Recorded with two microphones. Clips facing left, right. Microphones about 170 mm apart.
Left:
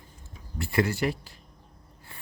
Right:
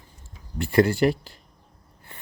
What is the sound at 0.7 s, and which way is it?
Speech, 30° right (ahead or behind).